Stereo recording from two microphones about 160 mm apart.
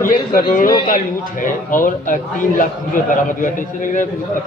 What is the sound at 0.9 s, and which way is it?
A man's voice, 55° left (ahead or behind).